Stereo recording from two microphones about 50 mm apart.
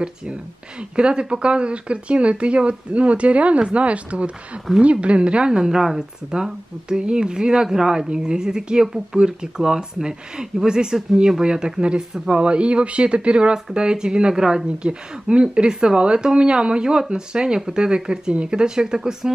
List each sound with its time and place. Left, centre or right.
0.9 s speech: centre
4.7 s a woman's voice: centre
5.0 s a woman's voice: right